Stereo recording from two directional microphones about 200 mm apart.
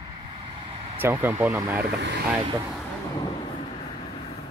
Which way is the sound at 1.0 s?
10° right (ahead or behind).